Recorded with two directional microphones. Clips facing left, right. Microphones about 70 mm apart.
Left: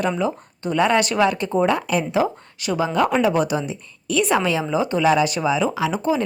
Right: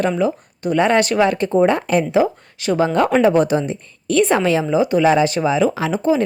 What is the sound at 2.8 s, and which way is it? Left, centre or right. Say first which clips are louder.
A woman's voice: right 4 dB; right.